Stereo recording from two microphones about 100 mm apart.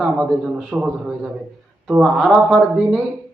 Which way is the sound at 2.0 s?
5° right (ahead or behind).